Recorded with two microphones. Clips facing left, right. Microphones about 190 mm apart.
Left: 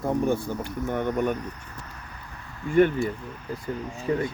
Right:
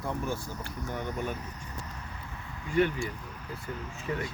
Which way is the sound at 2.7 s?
50° left (ahead or behind).